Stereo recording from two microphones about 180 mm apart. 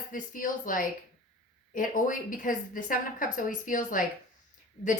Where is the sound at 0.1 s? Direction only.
50° left (ahead or behind).